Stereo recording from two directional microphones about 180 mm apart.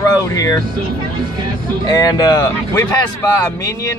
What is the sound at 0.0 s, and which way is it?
Vehicle, 20° left (ahead or behind).